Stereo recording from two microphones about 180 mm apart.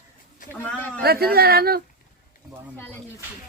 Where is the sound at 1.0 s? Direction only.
60° right (ahead or behind).